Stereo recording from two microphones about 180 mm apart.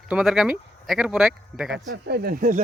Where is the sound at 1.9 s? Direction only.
65° right (ahead or behind).